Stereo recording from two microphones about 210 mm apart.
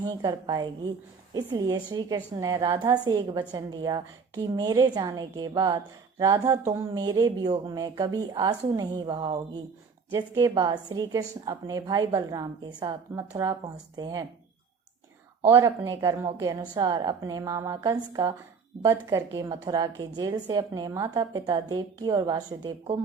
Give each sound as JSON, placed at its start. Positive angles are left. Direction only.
{"t": 0.0, "sound": "a woman's voice", "side_deg": -20}
{"t": 15.4, "sound": "a woman's voice", "side_deg": -15}